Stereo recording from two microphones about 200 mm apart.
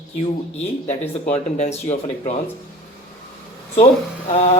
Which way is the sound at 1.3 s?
35° left (ahead or behind).